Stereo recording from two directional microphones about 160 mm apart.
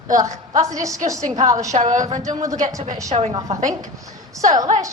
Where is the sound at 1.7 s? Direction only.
50° right (ahead or behind).